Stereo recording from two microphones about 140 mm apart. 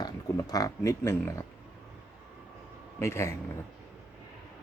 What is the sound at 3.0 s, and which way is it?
Speech, 20° left (ahead or behind).